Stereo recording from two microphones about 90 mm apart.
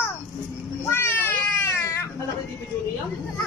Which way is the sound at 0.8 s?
25° left (ahead or behind).